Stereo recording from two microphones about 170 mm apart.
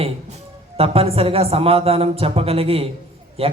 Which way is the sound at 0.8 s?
35° right (ahead or behind).